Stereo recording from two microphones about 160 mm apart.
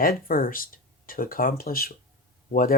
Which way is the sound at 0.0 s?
65° left (ahead or behind).